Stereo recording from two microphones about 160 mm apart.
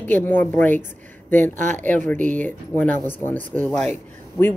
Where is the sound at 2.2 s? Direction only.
50° right (ahead or behind).